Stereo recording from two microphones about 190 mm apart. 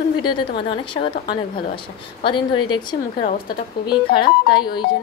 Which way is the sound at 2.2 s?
25° left (ahead or behind).